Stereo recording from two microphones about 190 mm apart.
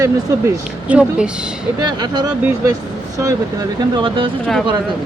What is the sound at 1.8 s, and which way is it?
Speech, 20° right (ahead or behind).